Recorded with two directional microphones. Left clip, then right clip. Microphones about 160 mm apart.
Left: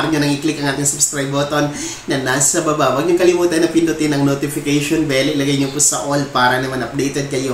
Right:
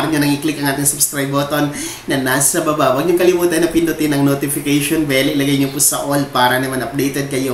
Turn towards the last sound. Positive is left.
turn(degrees=-10)  # may be behind; listen again after turning